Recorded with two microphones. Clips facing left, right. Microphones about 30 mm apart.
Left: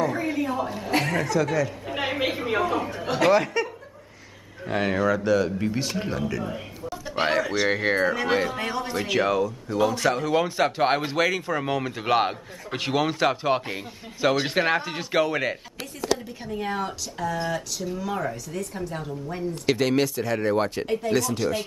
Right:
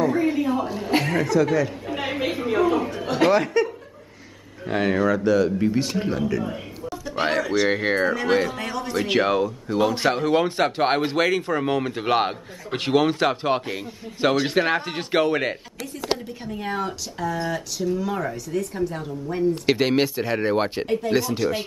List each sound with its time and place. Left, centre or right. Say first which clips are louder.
0.0 s a sound: right 4 dB; centre
0.9 s speech: right 3 dB; centre
2.0 s a sound: even; centre
2.6 s speech: right 4 dB; centre
8.5 s a man's voice: even; centre
9.0 s speech: right 3 dB; right
10.4 s speech: right 1 dB; centre
14.8 s speech: right 2 dB; centre
16.4 s speech: right 1 dB; centre
19.5 s speech: even; right
20.8 s speech: right 2 dB; centre
21.1 s speech: right 1 dB; centre